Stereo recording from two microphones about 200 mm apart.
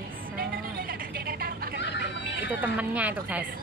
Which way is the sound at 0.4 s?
45° right (ahead or behind).